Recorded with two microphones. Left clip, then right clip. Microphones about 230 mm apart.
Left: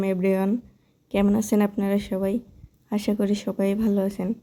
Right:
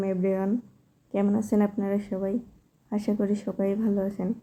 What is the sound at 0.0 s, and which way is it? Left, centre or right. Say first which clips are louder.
Speech: left 3 dB; left.